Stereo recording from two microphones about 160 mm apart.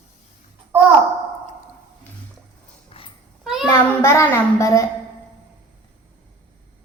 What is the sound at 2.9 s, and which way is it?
Dog, 35° left (ahead or behind).